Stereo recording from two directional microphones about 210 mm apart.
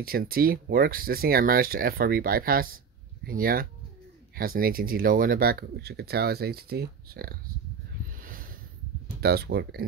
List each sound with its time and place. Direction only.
0.0 s speech: 45° right (ahead or behind)
8.2 s snort: 40° right (ahead or behind)
9.2 s speech: 50° right (ahead or behind)